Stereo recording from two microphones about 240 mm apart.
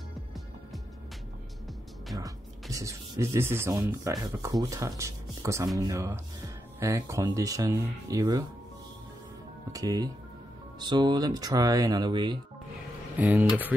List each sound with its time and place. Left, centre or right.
2.1 s speech: centre
9.7 s music: centre
10.8 s speech: centre
13.2 s speech: centre